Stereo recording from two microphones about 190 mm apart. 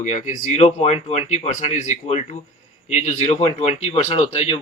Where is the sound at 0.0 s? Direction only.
40° left (ahead or behind).